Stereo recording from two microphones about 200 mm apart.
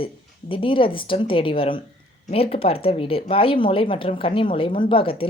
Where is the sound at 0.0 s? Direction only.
25° left (ahead or behind).